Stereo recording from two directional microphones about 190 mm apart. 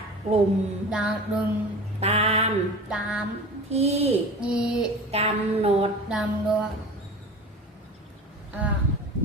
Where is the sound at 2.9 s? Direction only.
5° right (ahead or behind).